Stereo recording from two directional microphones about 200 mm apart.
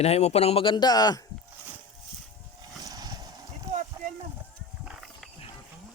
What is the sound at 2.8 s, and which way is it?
Vehicle, 20° right (ahead or behind).